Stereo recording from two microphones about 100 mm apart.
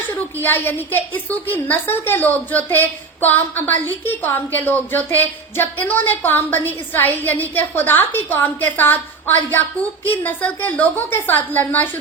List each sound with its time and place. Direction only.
0.4 s a woman's voice: 20° left (ahead or behind)